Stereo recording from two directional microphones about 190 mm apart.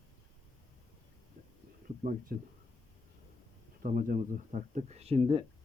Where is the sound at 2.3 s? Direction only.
50° right (ahead or behind).